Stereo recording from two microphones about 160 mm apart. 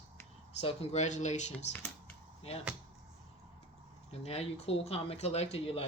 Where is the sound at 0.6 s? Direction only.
40° left (ahead or behind).